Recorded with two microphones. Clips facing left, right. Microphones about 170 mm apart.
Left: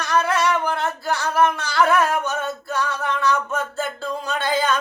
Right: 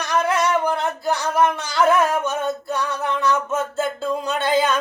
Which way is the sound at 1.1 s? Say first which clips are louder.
Left 1 dB; 20° right (ahead or behind).